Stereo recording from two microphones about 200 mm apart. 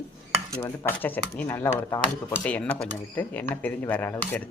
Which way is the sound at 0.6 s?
10° left (ahead or behind).